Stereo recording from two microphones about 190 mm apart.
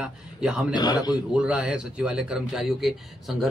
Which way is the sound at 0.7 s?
20° left (ahead or behind).